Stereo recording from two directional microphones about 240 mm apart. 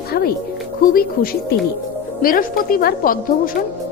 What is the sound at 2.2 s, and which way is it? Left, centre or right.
A woman's voice, left.